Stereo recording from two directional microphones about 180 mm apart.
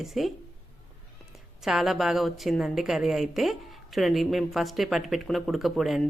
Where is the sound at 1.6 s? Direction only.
Centre (ahead or behind).